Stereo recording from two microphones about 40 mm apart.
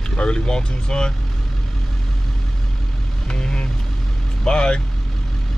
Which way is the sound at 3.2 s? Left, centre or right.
Left.